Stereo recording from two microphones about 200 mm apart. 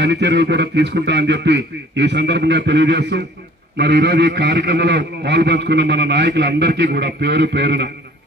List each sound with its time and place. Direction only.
0.0 s a man's voice: 60° right (ahead or behind)